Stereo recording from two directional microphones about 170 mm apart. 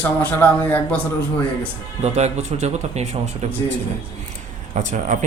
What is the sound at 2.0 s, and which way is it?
Speech, 40° right (ahead or behind).